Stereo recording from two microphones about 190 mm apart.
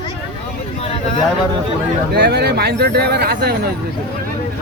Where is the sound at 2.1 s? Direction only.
55° right (ahead or behind).